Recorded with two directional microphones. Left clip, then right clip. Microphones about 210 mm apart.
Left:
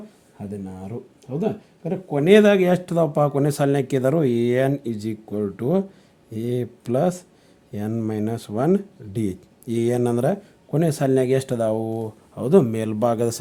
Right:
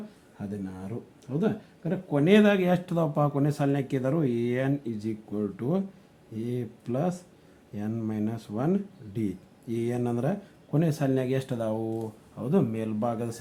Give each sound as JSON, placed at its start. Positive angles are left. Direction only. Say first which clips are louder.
{"t": 1.4, "sound": "speech", "louder": "left 4 dB", "side_deg": 30}